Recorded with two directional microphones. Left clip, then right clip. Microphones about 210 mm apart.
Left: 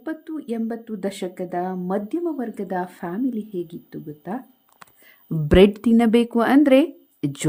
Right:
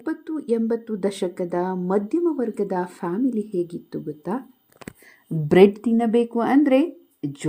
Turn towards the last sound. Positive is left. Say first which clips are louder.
# left 4 dB
turn(degrees=30)  # may be behind; listen again after turning